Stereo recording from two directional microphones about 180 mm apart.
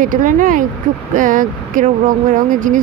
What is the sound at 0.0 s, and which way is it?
Speech, 50° right (ahead or behind).